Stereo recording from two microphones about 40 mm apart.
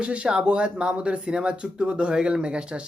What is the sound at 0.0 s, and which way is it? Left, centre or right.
Speech, right.